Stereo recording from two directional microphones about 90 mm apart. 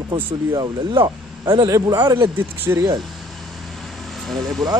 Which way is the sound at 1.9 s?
55° right (ahead or behind).